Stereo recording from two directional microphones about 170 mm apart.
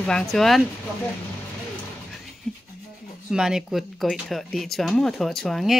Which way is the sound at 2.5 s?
5° right (ahead or behind).